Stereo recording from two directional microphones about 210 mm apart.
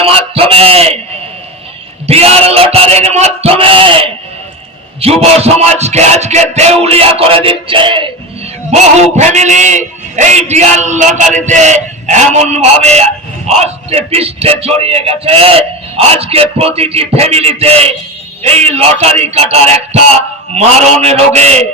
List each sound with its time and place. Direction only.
0.0 s speech: 25° right (ahead or behind)
2.0 s a man's voice: 30° right (ahead or behind)